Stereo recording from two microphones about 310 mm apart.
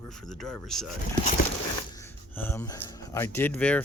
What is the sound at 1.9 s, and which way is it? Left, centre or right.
Speech, centre.